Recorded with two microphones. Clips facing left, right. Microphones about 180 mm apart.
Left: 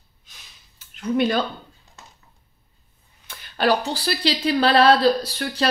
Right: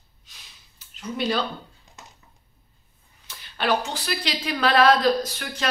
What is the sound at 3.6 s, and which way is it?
Speech, 35° left (ahead or behind).